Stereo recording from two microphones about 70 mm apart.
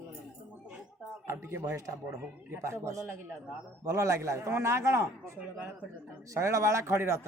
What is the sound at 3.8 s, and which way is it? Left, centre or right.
A man's voice, right.